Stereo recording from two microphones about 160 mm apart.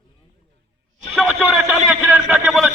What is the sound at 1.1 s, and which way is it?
A man's voice, centre (ahead or behind).